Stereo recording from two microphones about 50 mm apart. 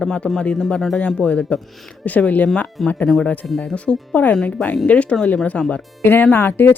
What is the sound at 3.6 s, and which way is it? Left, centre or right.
Speech, centre.